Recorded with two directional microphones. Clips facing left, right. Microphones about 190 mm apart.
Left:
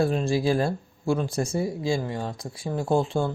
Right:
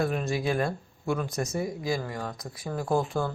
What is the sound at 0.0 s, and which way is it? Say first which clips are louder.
Speech: left 4 dB; 30° left (ahead or behind).